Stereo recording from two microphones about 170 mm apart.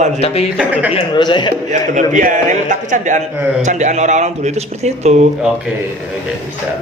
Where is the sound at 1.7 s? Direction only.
50° right (ahead or behind).